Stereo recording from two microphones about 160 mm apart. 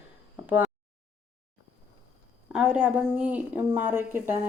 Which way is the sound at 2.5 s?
5° right (ahead or behind).